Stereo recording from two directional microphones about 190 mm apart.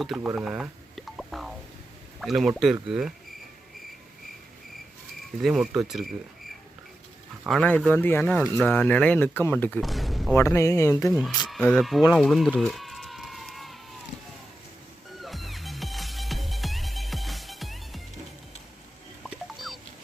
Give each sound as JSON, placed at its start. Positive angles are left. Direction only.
{"t": 0.0, "sound": "speech", "side_deg": 0}
{"t": 0.3, "sound": "a sound", "side_deg": -5}
{"t": 2.2, "sound": "speech", "side_deg": 0}
{"t": 5.4, "sound": "speech", "side_deg": 0}
{"t": 7.4, "sound": "speech", "side_deg": 5}
{"t": 10.3, "sound": "speech", "side_deg": 15}
{"t": 11.4, "sound": "speech", "side_deg": 0}
{"t": 12.1, "sound": "a sound", "side_deg": 0}
{"t": 15.2, "sound": "music", "side_deg": 0}
{"t": 19.2, "sound": "music", "side_deg": 0}